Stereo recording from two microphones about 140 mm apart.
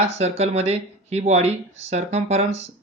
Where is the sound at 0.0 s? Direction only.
45° right (ahead or behind).